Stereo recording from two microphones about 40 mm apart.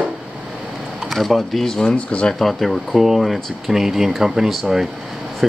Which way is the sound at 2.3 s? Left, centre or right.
Centre.